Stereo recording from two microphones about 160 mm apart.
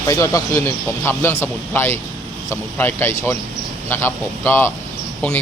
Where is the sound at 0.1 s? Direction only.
20° left (ahead or behind).